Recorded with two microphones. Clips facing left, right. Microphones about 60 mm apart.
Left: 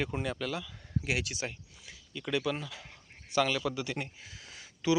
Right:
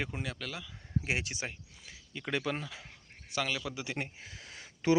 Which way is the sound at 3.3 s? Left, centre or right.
Centre.